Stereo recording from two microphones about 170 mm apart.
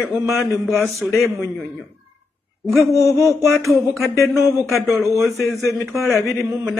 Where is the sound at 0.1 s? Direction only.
Centre (ahead or behind).